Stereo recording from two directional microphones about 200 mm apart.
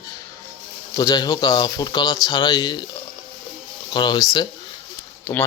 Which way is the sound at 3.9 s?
20° left (ahead or behind).